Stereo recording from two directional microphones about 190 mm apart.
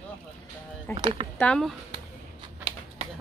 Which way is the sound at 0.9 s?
25° right (ahead or behind).